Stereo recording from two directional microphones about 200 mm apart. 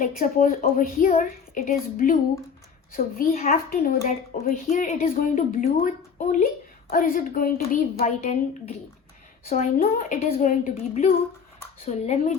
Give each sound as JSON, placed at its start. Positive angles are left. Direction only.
{"t": 0.0, "sound": "a woman's voice", "side_deg": 40}
{"t": 8.0, "sound": "a woman's voice", "side_deg": 35}
{"t": 9.5, "sound": "speech", "side_deg": 45}
{"t": 10.2, "sound": "a woman's voice", "side_deg": 30}